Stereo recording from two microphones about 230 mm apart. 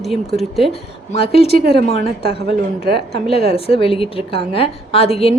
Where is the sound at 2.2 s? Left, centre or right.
Right.